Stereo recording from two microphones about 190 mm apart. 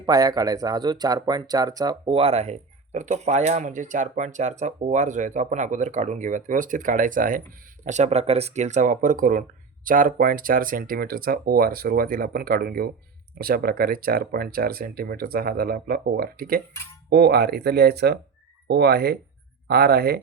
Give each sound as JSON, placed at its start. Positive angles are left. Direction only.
{"t": 0.0, "sound": "speech", "side_deg": -20}